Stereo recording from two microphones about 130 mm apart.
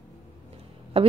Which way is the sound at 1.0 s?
50° right (ahead or behind).